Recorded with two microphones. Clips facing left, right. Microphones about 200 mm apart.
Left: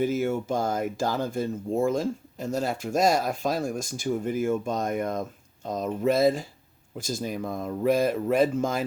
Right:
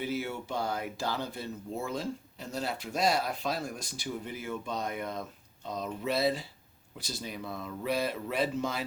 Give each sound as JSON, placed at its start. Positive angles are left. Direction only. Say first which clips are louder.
{"t": 0.0, "sound": "speech", "louder": "left 9 dB", "side_deg": 45}